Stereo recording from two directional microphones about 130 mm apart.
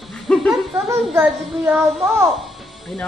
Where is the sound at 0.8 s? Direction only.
20° right (ahead or behind).